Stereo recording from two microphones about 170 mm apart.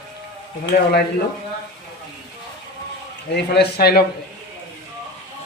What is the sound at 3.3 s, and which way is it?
Speech, 75° left (ahead or behind).